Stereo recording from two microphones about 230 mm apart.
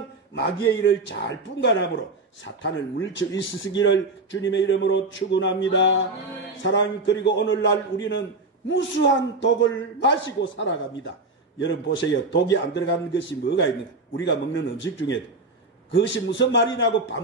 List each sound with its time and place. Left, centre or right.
0.3 s a man's voice: left